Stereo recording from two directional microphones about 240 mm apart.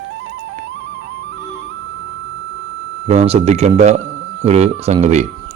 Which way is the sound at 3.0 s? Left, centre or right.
Right.